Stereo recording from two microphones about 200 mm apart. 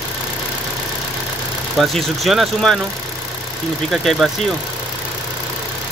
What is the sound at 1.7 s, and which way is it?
Speech, centre (ahead or behind).